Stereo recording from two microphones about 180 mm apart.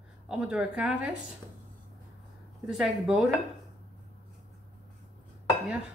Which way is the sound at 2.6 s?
Centre (ahead or behind).